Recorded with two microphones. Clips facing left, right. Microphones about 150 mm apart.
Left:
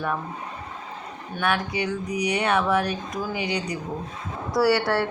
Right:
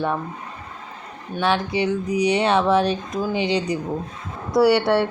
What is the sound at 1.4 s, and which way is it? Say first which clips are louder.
Speech: right 4 dB; 25° right (ahead or behind).